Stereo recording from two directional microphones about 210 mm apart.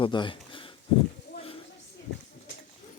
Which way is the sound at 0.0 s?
25° left (ahead or behind).